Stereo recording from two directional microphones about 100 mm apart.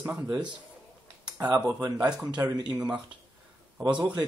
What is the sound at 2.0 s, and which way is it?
Speech, 10° right (ahead or behind).